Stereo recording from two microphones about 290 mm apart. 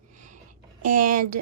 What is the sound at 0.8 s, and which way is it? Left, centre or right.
Speech, right.